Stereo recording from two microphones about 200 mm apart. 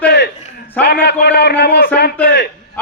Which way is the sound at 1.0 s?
55° left (ahead or behind).